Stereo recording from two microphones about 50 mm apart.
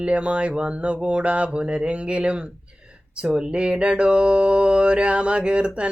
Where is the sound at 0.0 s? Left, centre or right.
Right.